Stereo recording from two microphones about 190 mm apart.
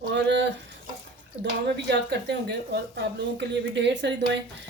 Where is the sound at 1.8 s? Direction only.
60° right (ahead or behind).